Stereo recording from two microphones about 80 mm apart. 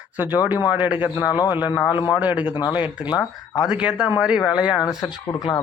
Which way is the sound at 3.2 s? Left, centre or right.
Left.